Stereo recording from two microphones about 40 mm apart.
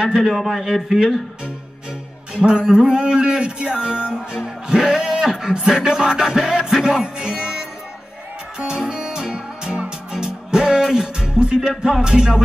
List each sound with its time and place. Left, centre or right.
0.0 s music: centre
0.3 s a man's voice: centre
2.3 s music: right